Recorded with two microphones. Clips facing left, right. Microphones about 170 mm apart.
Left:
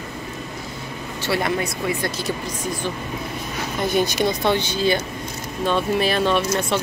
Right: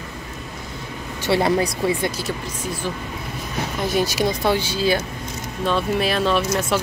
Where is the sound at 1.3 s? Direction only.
30° right (ahead or behind).